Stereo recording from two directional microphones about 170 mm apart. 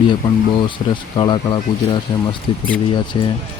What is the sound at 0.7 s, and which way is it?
Speech, 30° left (ahead or behind).